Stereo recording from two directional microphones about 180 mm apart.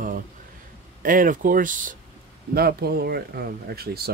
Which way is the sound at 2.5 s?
60° right (ahead or behind).